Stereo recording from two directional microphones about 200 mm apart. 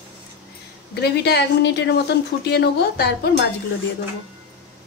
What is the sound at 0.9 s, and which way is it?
Speech, 55° left (ahead or behind).